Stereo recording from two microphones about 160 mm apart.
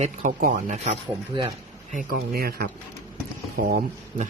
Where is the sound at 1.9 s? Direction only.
70° right (ahead or behind).